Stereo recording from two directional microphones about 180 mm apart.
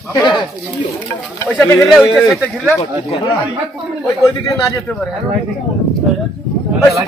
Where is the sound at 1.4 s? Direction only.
15° left (ahead or behind).